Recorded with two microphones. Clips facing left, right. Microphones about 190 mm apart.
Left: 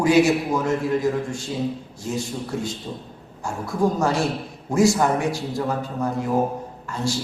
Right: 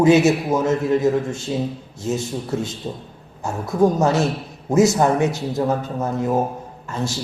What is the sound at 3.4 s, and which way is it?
A man's voice, 20° right (ahead or behind).